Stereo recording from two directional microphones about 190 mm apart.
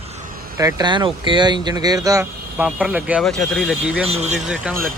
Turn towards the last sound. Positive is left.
turn(degrees=-5)  # may be behind; listen again after turning